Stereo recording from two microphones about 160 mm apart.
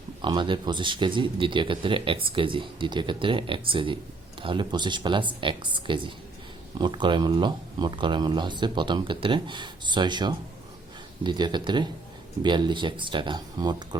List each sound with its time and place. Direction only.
0.2 s speech: 30° right (ahead or behind)